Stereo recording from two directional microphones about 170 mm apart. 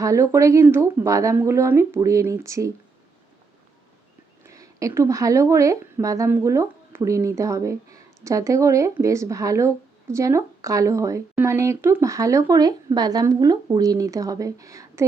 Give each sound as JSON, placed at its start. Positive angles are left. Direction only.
{"t": 0.0, "sound": "a woman's voice", "side_deg": -15}
{"t": 4.4, "sound": "a woman's voice", "side_deg": -20}